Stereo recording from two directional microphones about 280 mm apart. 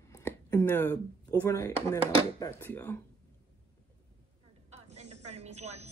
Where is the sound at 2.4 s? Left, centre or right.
Centre.